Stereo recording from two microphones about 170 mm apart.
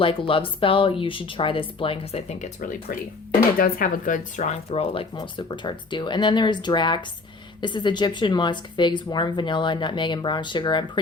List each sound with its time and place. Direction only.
0.0 s speech: 30° left (ahead or behind)
2.6 s a woman's voice: 55° left (ahead or behind); by 11.0 s 25° left (ahead or behind)